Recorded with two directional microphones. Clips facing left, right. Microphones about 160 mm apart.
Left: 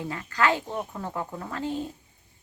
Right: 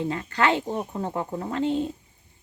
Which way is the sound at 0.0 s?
25° right (ahead or behind).